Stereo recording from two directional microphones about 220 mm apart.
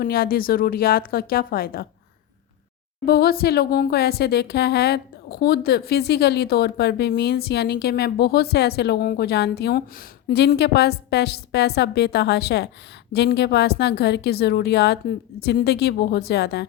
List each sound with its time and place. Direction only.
0.0 s speech: 45° left (ahead or behind)
3.1 s speech: 45° left (ahead or behind)